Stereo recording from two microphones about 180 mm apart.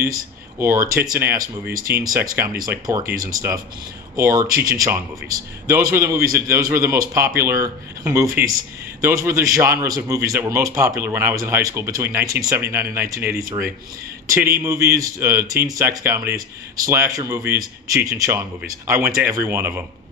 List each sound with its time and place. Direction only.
0.0 s speech: 15° right (ahead or behind)